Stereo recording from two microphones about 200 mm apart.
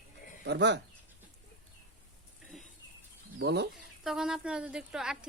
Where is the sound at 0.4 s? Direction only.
60° right (ahead or behind).